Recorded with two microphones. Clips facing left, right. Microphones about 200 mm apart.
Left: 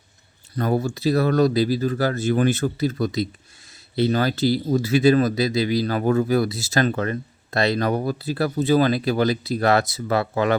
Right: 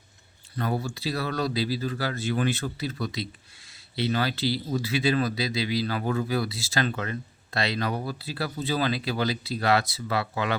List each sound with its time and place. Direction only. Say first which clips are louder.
0.5 s speech: left 7 dB; 45° left (ahead or behind)